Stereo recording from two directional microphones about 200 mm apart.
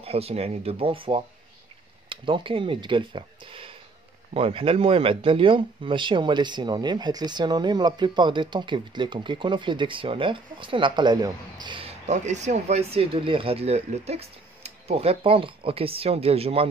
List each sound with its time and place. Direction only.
0.0 s speech: 30° right (ahead or behind)